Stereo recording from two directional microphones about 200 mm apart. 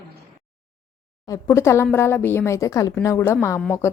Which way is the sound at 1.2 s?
15° left (ahead or behind).